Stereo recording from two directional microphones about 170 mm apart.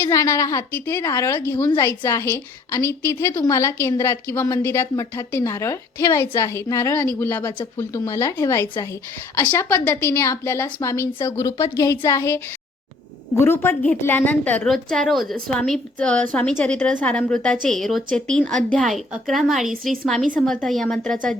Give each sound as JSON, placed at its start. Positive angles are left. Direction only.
{"t": 0.0, "sound": "a woman's voice", "side_deg": 15}
{"t": 13.4, "sound": "a woman's voice", "side_deg": 15}